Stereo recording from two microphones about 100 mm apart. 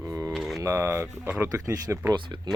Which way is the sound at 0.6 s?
30° right (ahead or behind).